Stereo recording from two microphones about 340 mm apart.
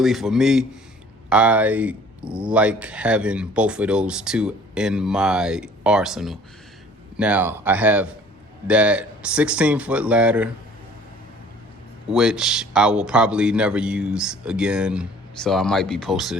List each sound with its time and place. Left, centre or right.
0.0 s speech: centre
12.1 s speech: centre